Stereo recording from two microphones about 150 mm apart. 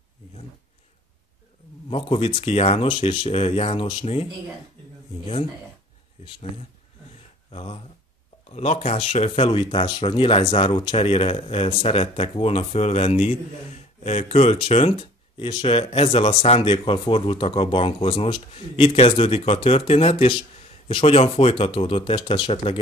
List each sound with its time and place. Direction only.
1.9 s speech: 35° left (ahead or behind)
7.5 s speech: 40° left (ahead or behind)